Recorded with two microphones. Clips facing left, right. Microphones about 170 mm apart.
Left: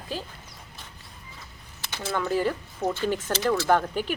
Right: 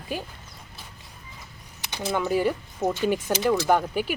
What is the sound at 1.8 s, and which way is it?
Speech, 15° right (ahead or behind).